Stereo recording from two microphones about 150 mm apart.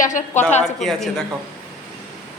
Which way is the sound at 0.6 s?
Centre (ahead or behind).